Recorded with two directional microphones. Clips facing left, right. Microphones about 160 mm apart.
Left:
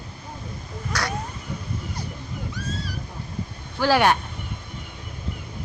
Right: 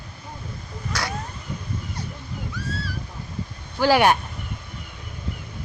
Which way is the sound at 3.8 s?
15° right (ahead or behind).